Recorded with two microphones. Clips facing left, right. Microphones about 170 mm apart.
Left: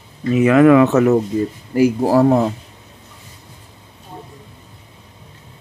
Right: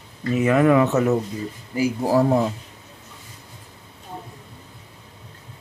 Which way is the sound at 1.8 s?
65° left (ahead or behind).